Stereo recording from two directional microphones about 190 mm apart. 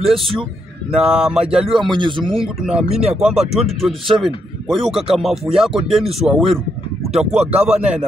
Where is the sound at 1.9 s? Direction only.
25° right (ahead or behind).